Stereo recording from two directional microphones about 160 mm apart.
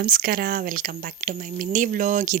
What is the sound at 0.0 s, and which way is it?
Speech, 65° right (ahead or behind).